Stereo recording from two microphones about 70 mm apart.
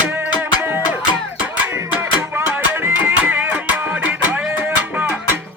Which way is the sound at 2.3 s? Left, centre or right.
Right.